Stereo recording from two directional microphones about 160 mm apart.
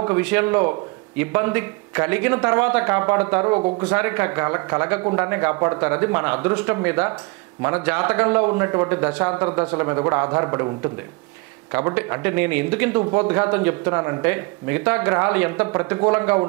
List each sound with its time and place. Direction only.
0.0 s a man's voice: 10° right (ahead or behind)